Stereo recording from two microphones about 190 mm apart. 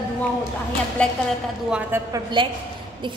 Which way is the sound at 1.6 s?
5° right (ahead or behind).